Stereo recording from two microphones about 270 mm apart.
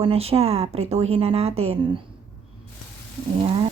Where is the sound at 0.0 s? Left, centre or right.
Right.